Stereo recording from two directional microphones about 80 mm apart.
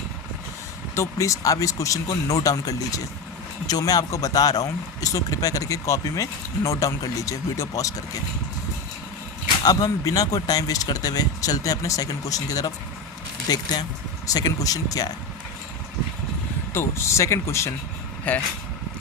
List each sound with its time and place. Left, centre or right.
0.9 s speech: left
9.6 s speech: left
14.3 s speech: left
16.7 s speech: left
18.3 s speech: centre